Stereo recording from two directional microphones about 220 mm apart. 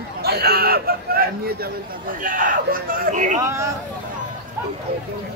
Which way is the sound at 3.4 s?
10° right (ahead or behind).